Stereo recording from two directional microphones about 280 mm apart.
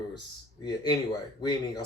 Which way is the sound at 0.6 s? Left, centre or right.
Centre.